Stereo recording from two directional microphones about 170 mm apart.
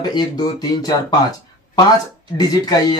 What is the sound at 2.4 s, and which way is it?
Speech, 25° left (ahead or behind).